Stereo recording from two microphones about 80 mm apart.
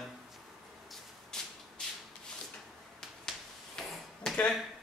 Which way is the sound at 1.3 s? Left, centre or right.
Centre.